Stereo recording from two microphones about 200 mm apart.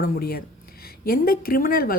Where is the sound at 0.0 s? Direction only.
50° left (ahead or behind).